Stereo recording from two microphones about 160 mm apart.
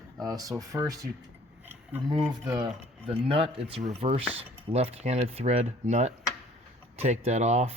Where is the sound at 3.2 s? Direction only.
35° right (ahead or behind).